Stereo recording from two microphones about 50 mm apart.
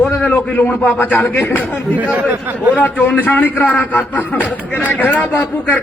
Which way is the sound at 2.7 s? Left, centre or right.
Left.